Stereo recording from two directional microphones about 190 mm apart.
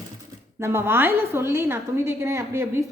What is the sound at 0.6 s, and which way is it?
A woman's voice, 15° right (ahead or behind).